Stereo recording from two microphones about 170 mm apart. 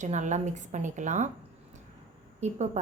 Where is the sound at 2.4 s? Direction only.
40° right (ahead or behind).